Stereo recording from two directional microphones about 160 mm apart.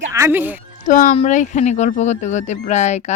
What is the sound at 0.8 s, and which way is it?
Speech, 50° left (ahead or behind).